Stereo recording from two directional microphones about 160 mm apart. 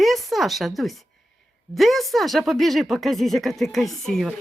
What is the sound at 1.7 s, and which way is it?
Speech, centre (ahead or behind).